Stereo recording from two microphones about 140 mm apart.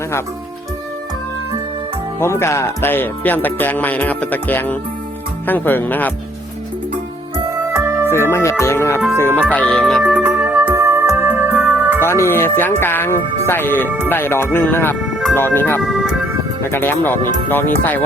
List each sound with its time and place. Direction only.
2.1 s speech: 20° left (ahead or behind)
7.5 s music: 20° right (ahead or behind)
8.1 s speech: 20° left (ahead or behind)
9.4 s speech: 10° left (ahead or behind)
10.1 s music: 10° right (ahead or behind)
10.8 s music: 20° right (ahead or behind)
12.0 s speech: 20° left (ahead or behind)
15.8 s speech: 5° right (ahead or behind)
16.6 s speech: 15° left (ahead or behind)